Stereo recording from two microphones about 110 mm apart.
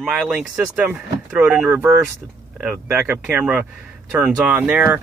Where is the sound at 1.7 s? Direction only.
20° right (ahead or behind).